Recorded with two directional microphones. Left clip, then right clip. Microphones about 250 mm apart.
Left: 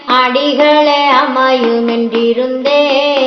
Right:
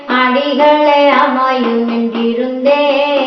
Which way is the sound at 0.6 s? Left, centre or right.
Left.